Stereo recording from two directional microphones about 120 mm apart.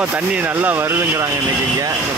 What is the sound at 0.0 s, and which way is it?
Speech, 10° right (ahead or behind).